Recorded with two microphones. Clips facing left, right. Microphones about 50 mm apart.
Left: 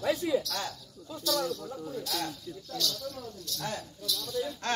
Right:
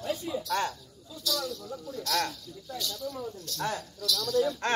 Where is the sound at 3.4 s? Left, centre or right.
Right.